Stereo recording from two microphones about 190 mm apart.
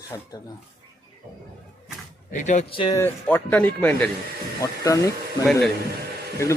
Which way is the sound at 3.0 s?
10° left (ahead or behind).